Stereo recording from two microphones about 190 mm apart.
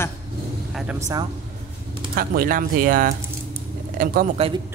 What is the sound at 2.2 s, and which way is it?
Speech, 50° right (ahead or behind).